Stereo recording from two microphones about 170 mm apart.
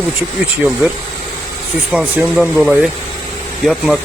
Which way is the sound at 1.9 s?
5° right (ahead or behind).